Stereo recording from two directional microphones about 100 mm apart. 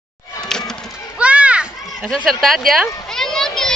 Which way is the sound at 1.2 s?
10° right (ahead or behind).